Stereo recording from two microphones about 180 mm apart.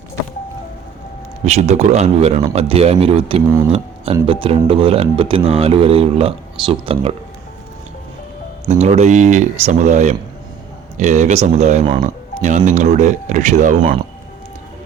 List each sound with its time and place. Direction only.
1.5 s speech: 40° right (ahead or behind)
8.6 s speech: 40° right (ahead or behind)